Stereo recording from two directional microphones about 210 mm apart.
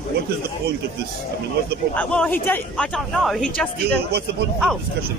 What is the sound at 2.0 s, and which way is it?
Speech, 5° left (ahead or behind).